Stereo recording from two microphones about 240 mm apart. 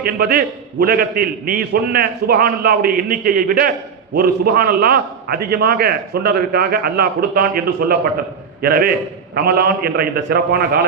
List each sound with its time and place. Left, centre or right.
0.0 s a man's voice: right